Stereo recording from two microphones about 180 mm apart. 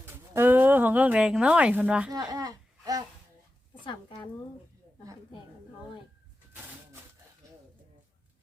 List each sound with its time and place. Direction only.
0.0 s a woman's voice: 10° right (ahead or behind)
2.3 s a sound: 20° right (ahead or behind)
3.8 s a woman's voice: 25° left (ahead or behind)